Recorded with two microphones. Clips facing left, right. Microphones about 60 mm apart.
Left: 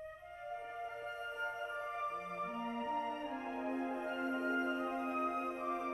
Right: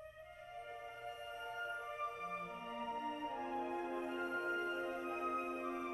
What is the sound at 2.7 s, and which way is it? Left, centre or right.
Music, left.